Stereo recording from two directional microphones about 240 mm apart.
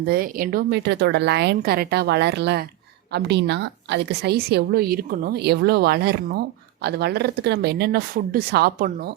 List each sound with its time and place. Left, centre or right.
0.1 s a woman's voice: right